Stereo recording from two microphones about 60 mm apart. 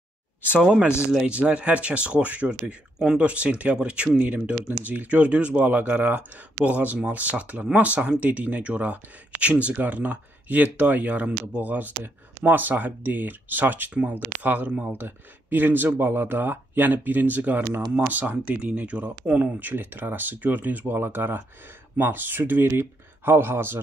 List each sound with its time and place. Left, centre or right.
0.7 s speech: centre; by 23.8 s right